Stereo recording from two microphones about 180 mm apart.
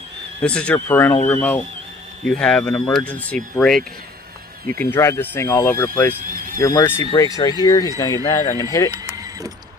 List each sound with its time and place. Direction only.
0.4 s speech: 5° left (ahead or behind)
6.2 s a sound: 50° right (ahead or behind)
6.6 s speech: 15° left (ahead or behind)
9.1 s vehicle: 20° right (ahead or behind)